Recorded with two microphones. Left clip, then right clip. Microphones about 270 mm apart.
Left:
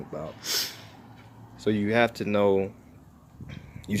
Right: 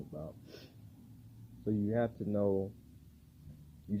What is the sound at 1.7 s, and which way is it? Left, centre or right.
Speech, centre.